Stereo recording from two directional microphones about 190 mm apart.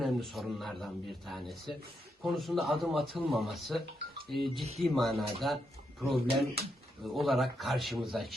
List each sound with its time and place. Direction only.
0.0 s a man's voice: centre (ahead or behind)